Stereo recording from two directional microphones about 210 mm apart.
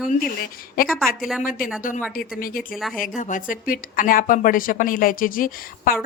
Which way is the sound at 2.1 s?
45° left (ahead or behind).